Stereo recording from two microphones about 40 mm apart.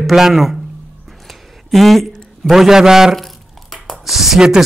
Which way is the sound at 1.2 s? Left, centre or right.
Centre.